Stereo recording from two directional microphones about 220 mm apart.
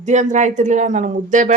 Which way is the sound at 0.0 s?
35° right (ahead or behind).